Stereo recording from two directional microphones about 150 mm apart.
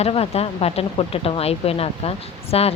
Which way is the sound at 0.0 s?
40° left (ahead or behind).